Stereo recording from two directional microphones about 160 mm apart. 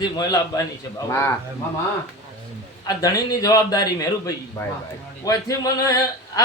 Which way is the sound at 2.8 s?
20° left (ahead or behind).